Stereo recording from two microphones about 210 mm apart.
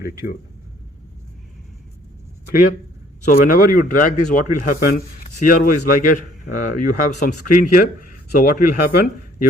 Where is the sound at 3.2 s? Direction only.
40° left (ahead or behind).